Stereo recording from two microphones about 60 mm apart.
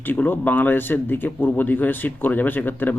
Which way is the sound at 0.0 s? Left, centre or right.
Left.